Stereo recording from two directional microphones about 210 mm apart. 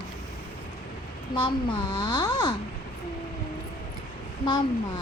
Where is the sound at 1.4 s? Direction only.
20° left (ahead or behind).